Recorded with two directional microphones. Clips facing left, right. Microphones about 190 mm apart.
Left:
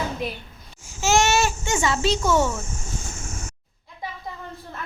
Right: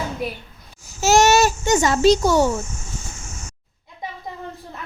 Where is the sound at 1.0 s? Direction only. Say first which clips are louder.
Right 5 dB; 40° right (ahead or behind).